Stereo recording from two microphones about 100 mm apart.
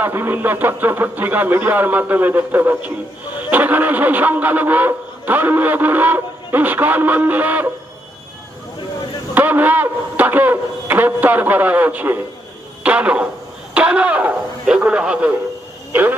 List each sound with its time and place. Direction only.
0.0 s a man's voice: 20° right (ahead or behind)
9.3 s a man's voice: 15° right (ahead or behind)